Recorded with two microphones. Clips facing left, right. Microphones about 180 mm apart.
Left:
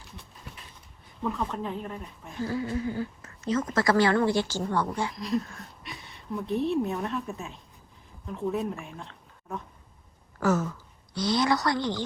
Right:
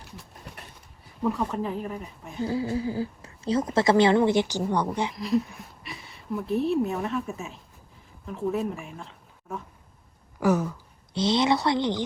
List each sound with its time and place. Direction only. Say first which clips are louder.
1.2 s speech: right 4 dB; 10° right (ahead or behind)
2.4 s speech: right 2 dB; 25° right (ahead or behind)
5.1 s speech: right 4 dB; centre (ahead or behind)
10.4 s speech: right 2 dB; 15° right (ahead or behind)
11.1 s speech: right 2 dB; 25° right (ahead or behind)